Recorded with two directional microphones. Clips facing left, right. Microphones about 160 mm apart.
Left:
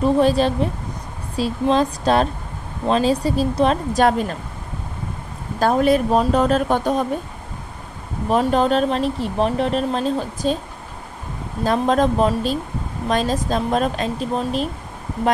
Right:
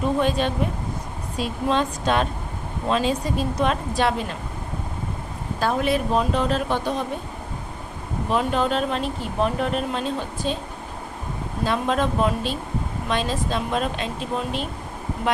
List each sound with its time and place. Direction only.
0.0 s speech: 35° left (ahead or behind)
5.6 s speech: 45° left (ahead or behind)
8.3 s speech: 40° left (ahead or behind)
11.6 s speech: 40° left (ahead or behind)